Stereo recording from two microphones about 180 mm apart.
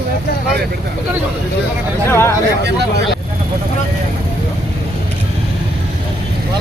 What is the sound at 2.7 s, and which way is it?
Speech, 65° right (ahead or behind).